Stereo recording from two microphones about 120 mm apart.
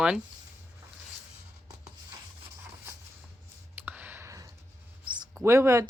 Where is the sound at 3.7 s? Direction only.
15° right (ahead or behind).